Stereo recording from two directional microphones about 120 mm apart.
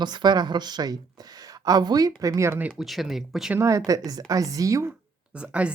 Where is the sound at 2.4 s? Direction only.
20° right (ahead or behind).